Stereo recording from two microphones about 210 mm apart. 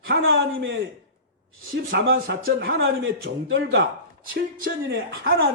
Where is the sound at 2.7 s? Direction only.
65° right (ahead or behind).